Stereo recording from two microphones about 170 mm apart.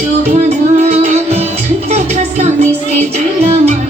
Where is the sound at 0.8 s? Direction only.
40° right (ahead or behind).